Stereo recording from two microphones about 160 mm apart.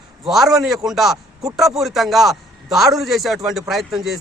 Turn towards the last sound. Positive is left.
turn(degrees=0)  # may be behind; listen again after turning